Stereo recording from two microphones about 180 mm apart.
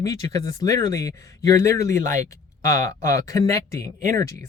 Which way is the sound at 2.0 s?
45° right (ahead or behind).